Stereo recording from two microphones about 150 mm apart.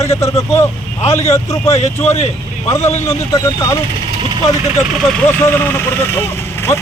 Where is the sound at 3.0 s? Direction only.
20° left (ahead or behind).